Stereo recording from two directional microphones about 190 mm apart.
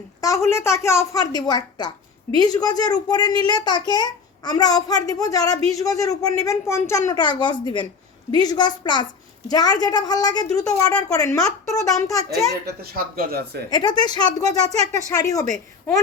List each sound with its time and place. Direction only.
0.2 s a sound: 15° left (ahead or behind)
0.5 s a child's voice: 15° left (ahead or behind)
12.6 s speech: 50° right (ahead or behind)
13.7 s a child's voice: 20° left (ahead or behind)